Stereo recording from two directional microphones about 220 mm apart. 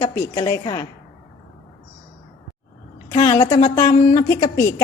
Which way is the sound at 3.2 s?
20° left (ahead or behind).